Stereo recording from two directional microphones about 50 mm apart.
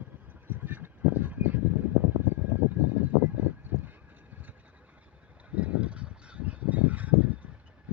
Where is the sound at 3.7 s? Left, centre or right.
Right.